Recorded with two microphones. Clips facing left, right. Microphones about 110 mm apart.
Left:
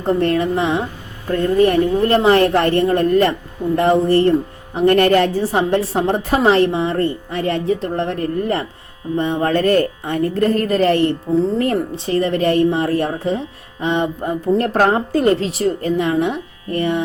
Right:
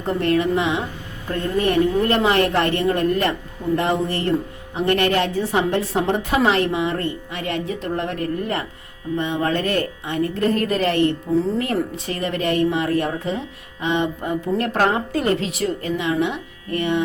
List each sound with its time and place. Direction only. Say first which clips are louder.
0.0 s a woman's voice: left 3 dB; 35° left (ahead or behind)